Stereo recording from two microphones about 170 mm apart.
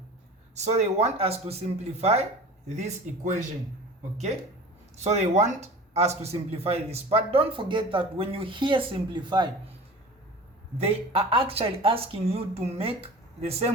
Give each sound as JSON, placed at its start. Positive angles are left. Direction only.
{"t": 0.6, "sound": "speech", "side_deg": -40}
{"t": 4.9, "sound": "speech", "side_deg": -40}
{"t": 10.8, "sound": "speech", "side_deg": -35}